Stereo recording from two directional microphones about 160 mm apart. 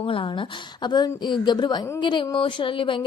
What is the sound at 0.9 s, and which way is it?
A woman's voice, 25° left (ahead or behind).